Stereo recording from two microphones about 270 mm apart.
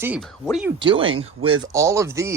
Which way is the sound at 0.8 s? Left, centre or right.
Centre.